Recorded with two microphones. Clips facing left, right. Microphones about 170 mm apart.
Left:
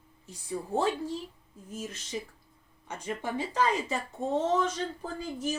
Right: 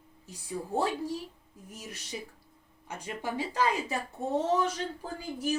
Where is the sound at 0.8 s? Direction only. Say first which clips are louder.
Left 1 dB; 10° right (ahead or behind).